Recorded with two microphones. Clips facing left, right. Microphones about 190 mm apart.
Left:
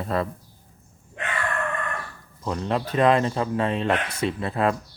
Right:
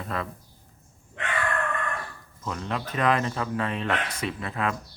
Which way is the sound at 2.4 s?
35° left (ahead or behind).